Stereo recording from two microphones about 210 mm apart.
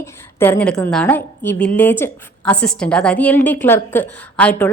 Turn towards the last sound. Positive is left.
turn(degrees=5)  # may be behind; listen again after turning